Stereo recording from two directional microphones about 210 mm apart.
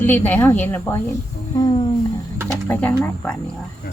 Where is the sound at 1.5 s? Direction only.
20° left (ahead or behind).